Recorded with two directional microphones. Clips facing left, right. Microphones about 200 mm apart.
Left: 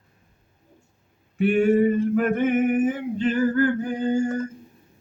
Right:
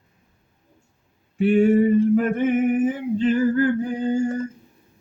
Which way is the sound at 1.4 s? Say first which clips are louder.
Right 2 dB; 30° right (ahead or behind).